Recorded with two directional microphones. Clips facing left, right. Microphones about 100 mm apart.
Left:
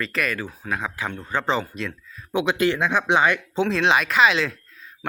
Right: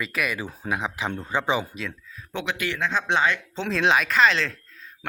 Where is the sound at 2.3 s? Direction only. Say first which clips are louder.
Left 8 dB; 15° left (ahead or behind).